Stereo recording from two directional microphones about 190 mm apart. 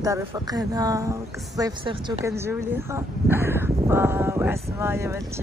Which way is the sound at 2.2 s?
15° right (ahead or behind).